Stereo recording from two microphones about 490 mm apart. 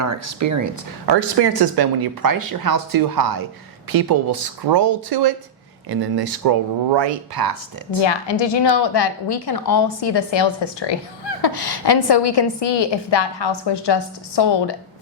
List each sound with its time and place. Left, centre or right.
0.0 s speech: right
1.0 s speech: right
8.0 s a woman's voice: left